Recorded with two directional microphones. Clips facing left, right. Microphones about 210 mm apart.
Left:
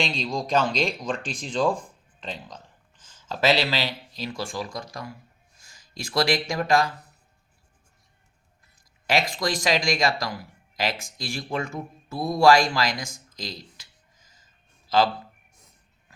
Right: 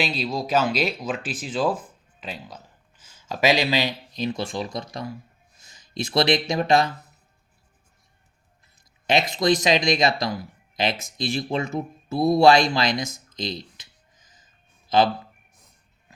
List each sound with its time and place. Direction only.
0.0 s speech: 5° right (ahead or behind); by 6.9 s 20° right (ahead or behind)
9.0 s speech: 20° right (ahead or behind)
14.8 s a sound: 20° right (ahead or behind)